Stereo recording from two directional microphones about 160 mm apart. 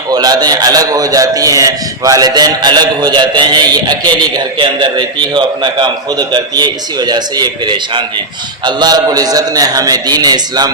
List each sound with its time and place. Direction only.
0.1 s a man's voice: 25° right (ahead or behind)